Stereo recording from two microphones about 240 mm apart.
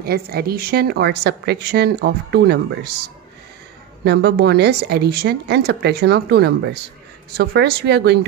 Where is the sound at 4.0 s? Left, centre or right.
Right.